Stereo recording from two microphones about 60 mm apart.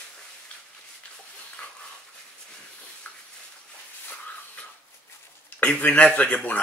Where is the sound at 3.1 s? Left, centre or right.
Left.